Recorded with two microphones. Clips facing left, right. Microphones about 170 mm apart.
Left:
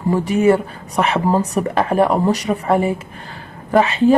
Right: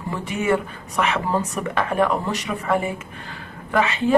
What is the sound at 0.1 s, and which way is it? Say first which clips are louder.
A woman's voice: left 8 dB; 35° left (ahead or behind).